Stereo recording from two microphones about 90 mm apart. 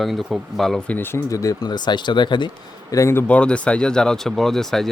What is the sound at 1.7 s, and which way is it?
Speech, 55° left (ahead or behind).